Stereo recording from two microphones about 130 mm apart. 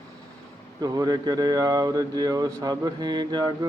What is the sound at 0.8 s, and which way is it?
Speech, 30° right (ahead or behind).